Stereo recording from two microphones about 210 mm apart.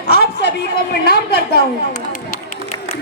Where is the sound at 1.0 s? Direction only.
50° left (ahead or behind).